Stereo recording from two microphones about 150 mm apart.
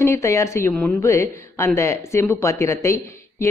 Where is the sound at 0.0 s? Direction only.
20° left (ahead or behind).